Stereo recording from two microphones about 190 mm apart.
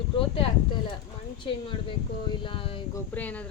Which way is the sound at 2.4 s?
25° left (ahead or behind).